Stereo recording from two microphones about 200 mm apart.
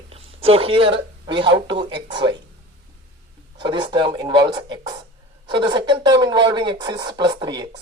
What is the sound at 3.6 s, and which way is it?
Speech, 20° right (ahead or behind).